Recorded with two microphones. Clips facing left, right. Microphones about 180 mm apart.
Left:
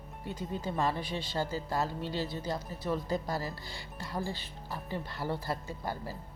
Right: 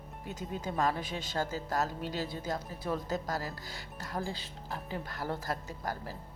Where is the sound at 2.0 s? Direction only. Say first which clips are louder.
Left 1 dB; 45° right (ahead or behind).